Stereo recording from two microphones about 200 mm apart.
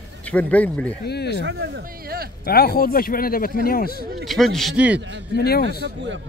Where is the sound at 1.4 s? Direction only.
55° right (ahead or behind).